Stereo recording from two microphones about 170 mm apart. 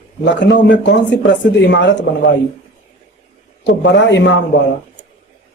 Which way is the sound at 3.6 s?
90° left.